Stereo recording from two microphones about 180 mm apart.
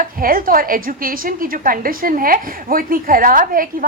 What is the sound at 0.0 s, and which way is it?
A woman's voice, 55° right (ahead or behind).